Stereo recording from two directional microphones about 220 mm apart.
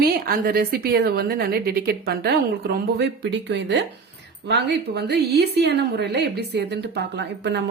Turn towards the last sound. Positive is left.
turn(degrees=-50)  # may be behind; listen again after turning